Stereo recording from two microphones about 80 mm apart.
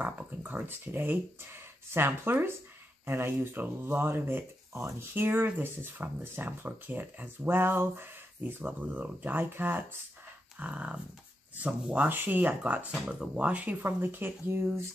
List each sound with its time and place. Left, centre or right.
0.0 s speech: right
10.6 s dog: centre
11.5 s speech: centre